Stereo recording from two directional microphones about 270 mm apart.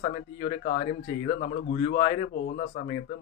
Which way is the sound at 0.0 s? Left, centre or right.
Left.